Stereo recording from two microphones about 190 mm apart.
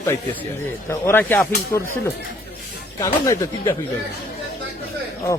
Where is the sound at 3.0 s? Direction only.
15° left (ahead or behind).